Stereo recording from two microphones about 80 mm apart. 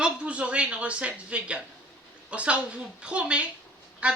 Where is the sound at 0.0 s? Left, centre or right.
Centre.